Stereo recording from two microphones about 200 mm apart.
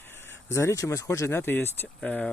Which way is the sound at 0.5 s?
15° left (ahead or behind).